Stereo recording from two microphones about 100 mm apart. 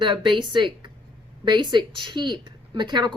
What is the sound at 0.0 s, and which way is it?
Speech, 50° right (ahead or behind).